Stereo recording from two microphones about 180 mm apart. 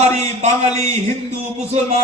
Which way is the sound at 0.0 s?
40° right (ahead or behind).